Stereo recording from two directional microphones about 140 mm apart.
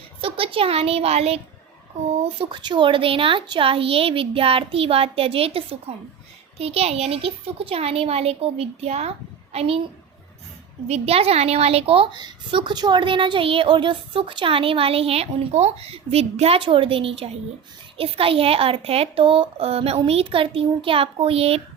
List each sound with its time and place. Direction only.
0.2 s a woman's voice: 40° right (ahead or behind)
2.4 s a woman's voice: 35° right (ahead or behind)
10.8 s a woman's voice: 50° right (ahead or behind)